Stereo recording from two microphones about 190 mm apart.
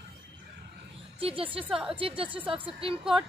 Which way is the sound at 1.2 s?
30° right (ahead or behind).